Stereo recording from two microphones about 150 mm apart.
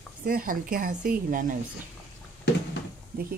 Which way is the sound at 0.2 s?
70° right (ahead or behind).